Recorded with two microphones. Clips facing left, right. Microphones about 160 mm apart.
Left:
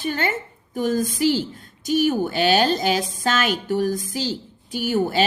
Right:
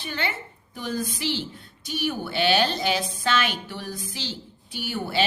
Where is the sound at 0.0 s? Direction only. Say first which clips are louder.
Left 6 dB; 45° left (ahead or behind).